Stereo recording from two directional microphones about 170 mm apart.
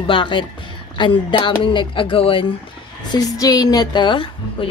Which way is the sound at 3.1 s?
20° left (ahead or behind).